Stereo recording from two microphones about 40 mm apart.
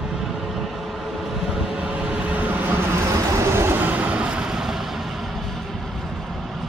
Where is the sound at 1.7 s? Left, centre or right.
Right.